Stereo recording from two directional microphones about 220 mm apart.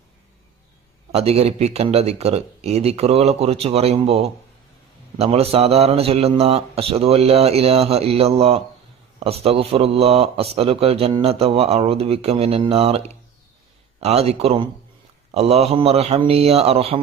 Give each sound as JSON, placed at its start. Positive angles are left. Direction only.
{"t": 1.1, "sound": "a man's voice", "side_deg": -30}